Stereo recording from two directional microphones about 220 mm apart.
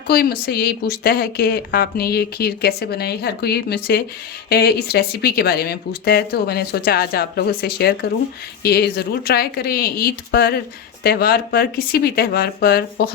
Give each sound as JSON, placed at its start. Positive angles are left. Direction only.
{"t": 0.1, "sound": "speech", "side_deg": 45}